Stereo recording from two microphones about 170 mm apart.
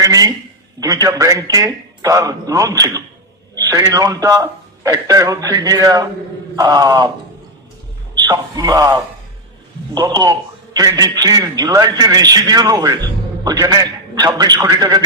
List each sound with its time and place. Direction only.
0.0 s a man's voice: 20° right (ahead or behind)
8.1 s a man's voice: 20° right (ahead or behind)